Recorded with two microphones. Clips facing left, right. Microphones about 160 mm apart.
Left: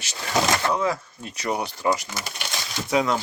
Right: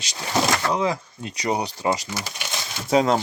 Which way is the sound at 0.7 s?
15° right (ahead or behind).